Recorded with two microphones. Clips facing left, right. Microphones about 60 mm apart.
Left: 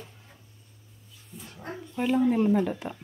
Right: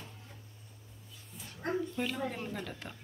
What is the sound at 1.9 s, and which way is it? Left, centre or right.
A man's voice, centre.